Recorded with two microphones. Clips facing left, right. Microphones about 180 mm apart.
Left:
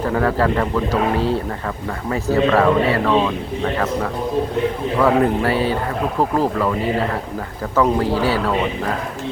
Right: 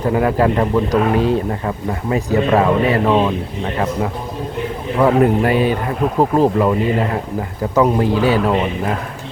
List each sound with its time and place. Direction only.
0.1 s a man's voice: 15° right (ahead or behind)
4.9 s a man's voice: 15° right (ahead or behind)
7.8 s a man's voice: 20° right (ahead or behind)